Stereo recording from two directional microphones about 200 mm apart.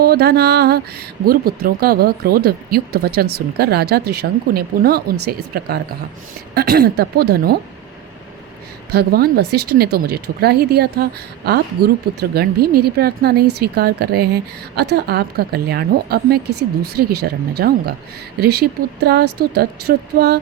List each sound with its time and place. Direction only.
0.0 s a woman's voice: 50° right (ahead or behind)
8.9 s a woman's voice: 50° right (ahead or behind)